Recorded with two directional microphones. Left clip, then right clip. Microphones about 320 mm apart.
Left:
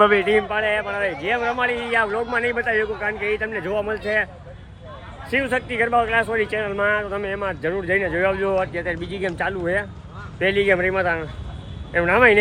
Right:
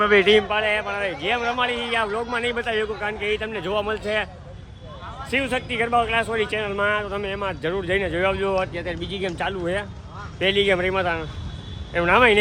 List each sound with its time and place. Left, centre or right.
0.2 s speech: right
5.3 s speech: centre